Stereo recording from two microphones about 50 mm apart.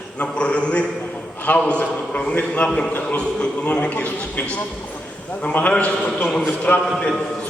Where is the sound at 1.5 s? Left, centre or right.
Left.